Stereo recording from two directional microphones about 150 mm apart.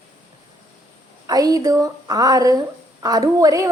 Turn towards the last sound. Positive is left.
turn(degrees=-20)  # may be behind; listen again after turning